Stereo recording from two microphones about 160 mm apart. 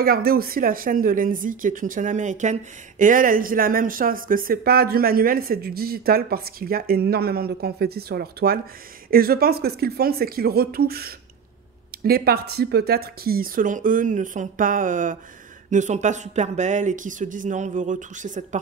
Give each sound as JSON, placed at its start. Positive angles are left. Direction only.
{"t": 0.0, "sound": "a woman's voice", "side_deg": -70}